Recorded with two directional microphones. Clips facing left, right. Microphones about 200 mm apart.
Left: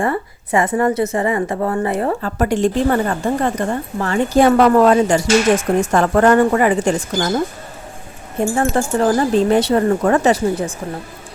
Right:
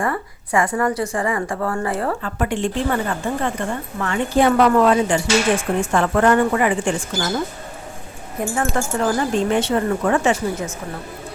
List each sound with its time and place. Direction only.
0.0 s a woman's voice: 25° left (ahead or behind)
2.2 s a woman's voice: 40° left (ahead or behind)